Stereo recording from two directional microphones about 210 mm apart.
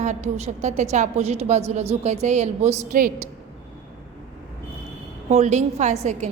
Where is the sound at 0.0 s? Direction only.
35° right (ahead or behind).